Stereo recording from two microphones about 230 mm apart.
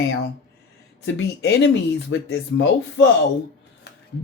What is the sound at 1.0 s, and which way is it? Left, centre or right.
Speech, left.